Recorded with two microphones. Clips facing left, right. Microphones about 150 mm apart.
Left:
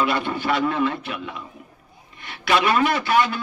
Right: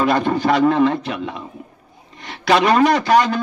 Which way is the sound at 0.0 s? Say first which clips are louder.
Right 6 dB; 45° right (ahead or behind).